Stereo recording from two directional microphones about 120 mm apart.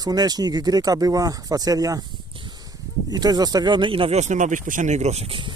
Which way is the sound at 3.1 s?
35° right (ahead or behind).